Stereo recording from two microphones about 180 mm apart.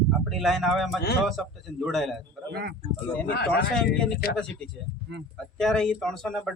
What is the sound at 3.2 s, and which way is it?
Speech, 65° left (ahead or behind).